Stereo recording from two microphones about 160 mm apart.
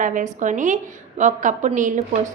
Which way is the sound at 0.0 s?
55° right (ahead or behind).